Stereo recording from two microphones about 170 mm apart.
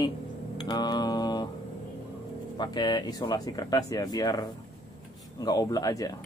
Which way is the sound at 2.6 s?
25° left (ahead or behind).